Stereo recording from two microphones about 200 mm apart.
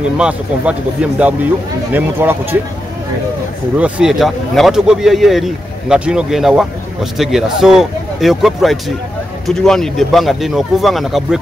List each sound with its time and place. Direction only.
0.2 s speech: 5° right (ahead or behind)
3.7 s speech: 5° right (ahead or behind)